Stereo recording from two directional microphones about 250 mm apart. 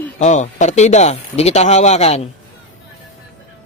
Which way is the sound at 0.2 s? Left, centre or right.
Left.